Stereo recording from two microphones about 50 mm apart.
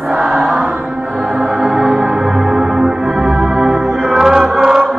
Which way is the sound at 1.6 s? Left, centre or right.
Centre.